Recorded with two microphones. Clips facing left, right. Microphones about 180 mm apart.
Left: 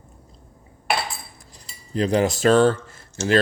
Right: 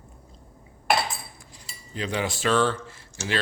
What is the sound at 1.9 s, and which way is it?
Speech, 40° left (ahead or behind).